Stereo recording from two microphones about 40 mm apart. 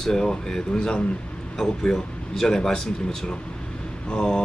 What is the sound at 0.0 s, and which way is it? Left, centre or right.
Speech, centre.